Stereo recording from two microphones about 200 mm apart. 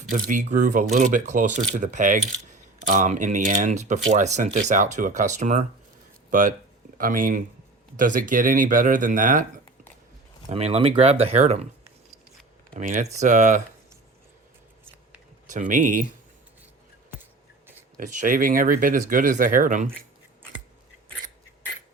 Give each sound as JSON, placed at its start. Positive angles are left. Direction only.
{"t": 0.1, "sound": "speech", "side_deg": -40}
{"t": 7.0, "sound": "speech", "side_deg": -45}
{"t": 10.5, "sound": "speech", "side_deg": -30}
{"t": 12.7, "sound": "speech", "side_deg": -40}
{"t": 15.4, "sound": "speech", "side_deg": -40}
{"t": 17.9, "sound": "speech", "side_deg": -40}